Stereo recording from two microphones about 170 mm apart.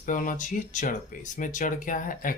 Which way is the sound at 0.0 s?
50° left (ahead or behind).